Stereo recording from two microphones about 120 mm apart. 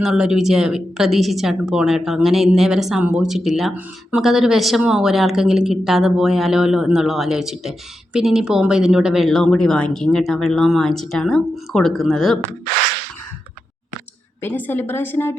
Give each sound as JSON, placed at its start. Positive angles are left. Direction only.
{"t": 0.0, "sound": "speech", "side_deg": -5}
{"t": 14.4, "sound": "a woman's voice", "side_deg": 15}